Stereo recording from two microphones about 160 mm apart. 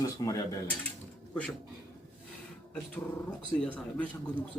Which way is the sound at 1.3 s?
5° left (ahead or behind).